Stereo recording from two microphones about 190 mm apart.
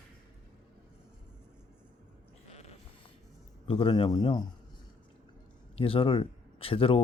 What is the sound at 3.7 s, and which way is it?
Speech, 30° left (ahead or behind).